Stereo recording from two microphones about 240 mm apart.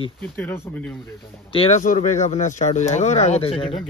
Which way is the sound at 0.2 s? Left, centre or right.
Centre.